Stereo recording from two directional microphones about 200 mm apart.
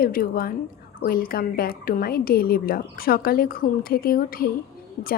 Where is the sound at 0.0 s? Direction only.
45° left (ahead or behind).